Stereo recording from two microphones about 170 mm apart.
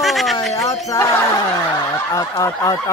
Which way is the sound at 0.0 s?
Centre (ahead or behind).